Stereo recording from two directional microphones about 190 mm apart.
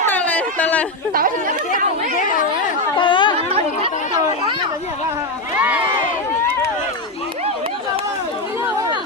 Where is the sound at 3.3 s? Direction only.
30° right (ahead or behind).